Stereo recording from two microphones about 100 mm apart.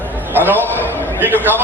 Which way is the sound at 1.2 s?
20° right (ahead or behind).